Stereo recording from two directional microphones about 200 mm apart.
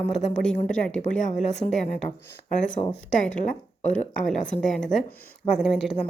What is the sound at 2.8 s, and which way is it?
Speech, 20° left (ahead or behind).